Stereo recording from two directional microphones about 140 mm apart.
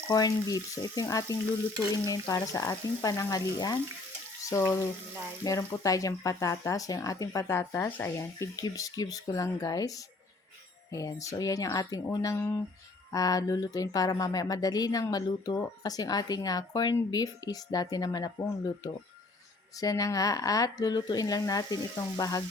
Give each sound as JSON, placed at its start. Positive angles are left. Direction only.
{"t": 0.1, "sound": "speech", "side_deg": 25}
{"t": 4.4, "sound": "frying", "side_deg": 20}
{"t": 5.4, "sound": "speech", "side_deg": 25}
{"t": 10.9, "sound": "speech", "side_deg": 25}